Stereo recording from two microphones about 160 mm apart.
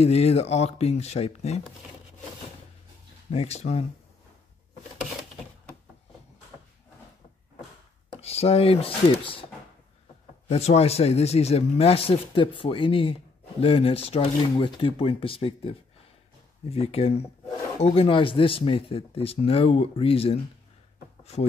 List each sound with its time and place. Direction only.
0.0 s speech: 40° left (ahead or behind)
3.3 s speech: 45° left (ahead or behind)
8.2 s speech: 40° left (ahead or behind)
10.5 s speech: 40° left (ahead or behind)
21.2 s a sound: 40° left (ahead or behind)